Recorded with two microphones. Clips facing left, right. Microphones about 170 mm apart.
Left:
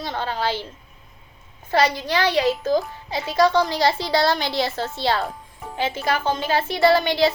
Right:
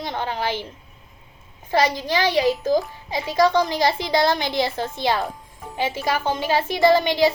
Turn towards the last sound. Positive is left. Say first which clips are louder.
# right 1 dB
turn(degrees=-15)  # may be behind; listen again after turning